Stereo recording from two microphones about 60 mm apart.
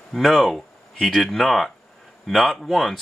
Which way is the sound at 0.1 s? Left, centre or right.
Centre.